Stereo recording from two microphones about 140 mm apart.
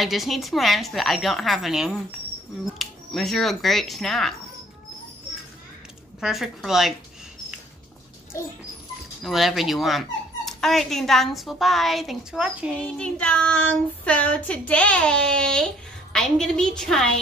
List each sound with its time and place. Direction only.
0.0 s speech: centre (ahead or behind)
6.2 s speech: centre (ahead or behind)
8.3 s dog: 20° left (ahead or behind)
9.2 s speech: centre (ahead or behind)
12.7 s child singing: 10° left (ahead or behind)
14.7 s speech: 10° left (ahead or behind)